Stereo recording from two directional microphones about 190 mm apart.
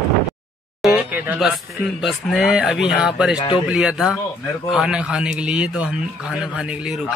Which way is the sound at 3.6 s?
5° right (ahead or behind).